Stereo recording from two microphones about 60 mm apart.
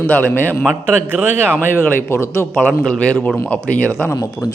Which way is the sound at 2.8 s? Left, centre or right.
Left.